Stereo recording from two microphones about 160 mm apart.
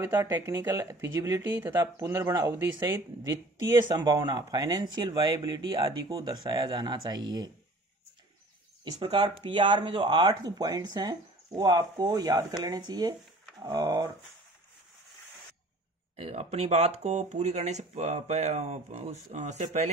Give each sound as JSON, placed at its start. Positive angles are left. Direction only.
{"t": 0.0, "sound": "speech", "side_deg": -15}
{"t": 8.8, "sound": "speech", "side_deg": -30}
{"t": 16.2, "sound": "speech", "side_deg": -40}